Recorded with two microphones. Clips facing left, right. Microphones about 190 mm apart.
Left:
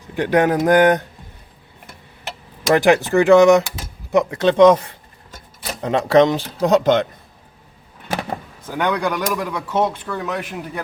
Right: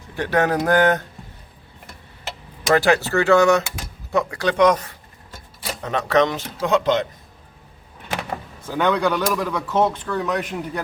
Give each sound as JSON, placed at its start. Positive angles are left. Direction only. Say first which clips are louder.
{"t": 0.1, "sound": "speech", "louder": "left 4 dB", "side_deg": 15}
{"t": 2.6, "sound": "speech", "louder": "left 3 dB", "side_deg": 15}
{"t": 5.8, "sound": "speech", "louder": "left 5 dB", "side_deg": 30}
{"t": 8.8, "sound": "speech", "louder": "right 1 dB", "side_deg": 10}